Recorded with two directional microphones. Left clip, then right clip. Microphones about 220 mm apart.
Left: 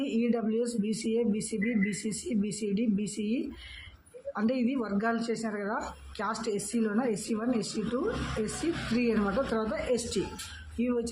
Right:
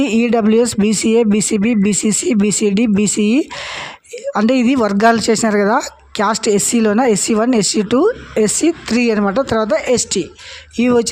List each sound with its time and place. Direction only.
0.0 s speech: 50° right (ahead or behind)